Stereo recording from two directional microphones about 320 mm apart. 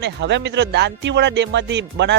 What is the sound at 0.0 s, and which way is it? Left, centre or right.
Speech, right.